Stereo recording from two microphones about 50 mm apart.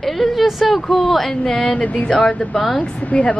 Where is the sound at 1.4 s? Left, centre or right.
Left.